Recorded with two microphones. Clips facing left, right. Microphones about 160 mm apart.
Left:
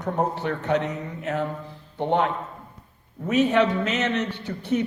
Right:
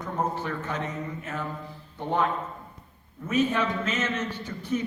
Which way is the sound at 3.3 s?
70° left (ahead or behind).